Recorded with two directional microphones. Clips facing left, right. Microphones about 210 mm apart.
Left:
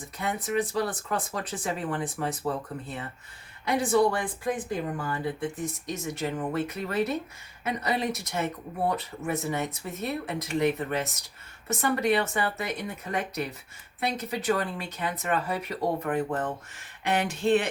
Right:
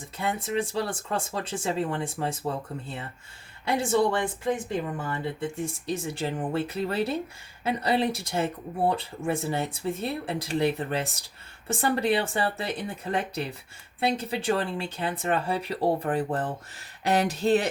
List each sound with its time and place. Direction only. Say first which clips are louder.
0.2 s speech: even; 25° right (ahead or behind)
3.7 s speech: even; 25° right (ahead or behind)